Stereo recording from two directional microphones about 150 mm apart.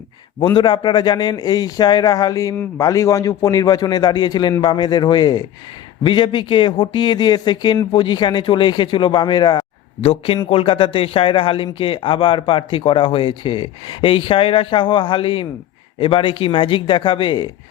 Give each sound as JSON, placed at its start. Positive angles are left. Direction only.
{"t": 0.5, "sound": "a man's voice", "side_deg": 30}
{"t": 10.0, "sound": "a man's voice", "side_deg": 40}